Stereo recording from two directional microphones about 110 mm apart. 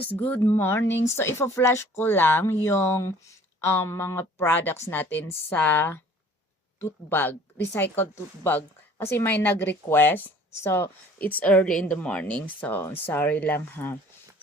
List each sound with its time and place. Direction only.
0.0 s a woman's voice: 15° left (ahead or behind)